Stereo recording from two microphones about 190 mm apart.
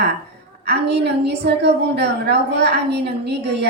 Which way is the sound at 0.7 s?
60° right (ahead or behind).